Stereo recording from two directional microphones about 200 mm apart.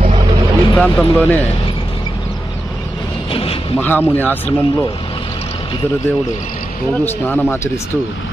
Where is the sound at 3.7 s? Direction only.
10° left (ahead or behind).